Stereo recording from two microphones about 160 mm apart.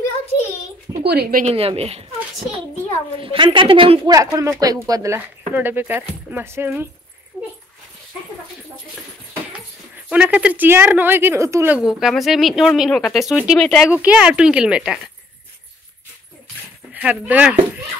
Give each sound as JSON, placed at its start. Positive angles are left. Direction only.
{"t": 1.0, "sound": "speech", "side_deg": -80}
{"t": 1.4, "sound": "a woman's voice", "side_deg": -40}
{"t": 3.2, "sound": "a woman's voice", "side_deg": -30}
{"t": 4.1, "sound": "speech", "side_deg": -20}
{"t": 10.0, "sound": "speech", "side_deg": -10}
{"t": 11.8, "sound": "speech", "side_deg": 0}
{"t": 16.9, "sound": "speech", "side_deg": -10}